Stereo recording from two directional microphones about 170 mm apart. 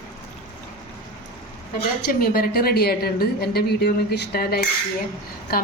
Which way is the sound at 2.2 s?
60° left (ahead or behind).